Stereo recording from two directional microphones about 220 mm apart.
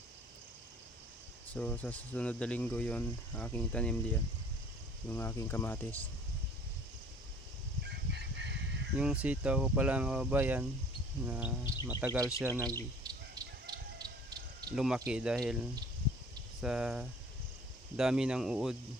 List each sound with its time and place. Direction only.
1.5 s speech: 5° left (ahead or behind)
8.1 s chicken: 50° right (ahead or behind)
9.0 s speech: 5° right (ahead or behind)
13.0 s chicken: 15° right (ahead or behind)
14.3 s a sound: 45° right (ahead or behind)
14.8 s speech: centre (ahead or behind)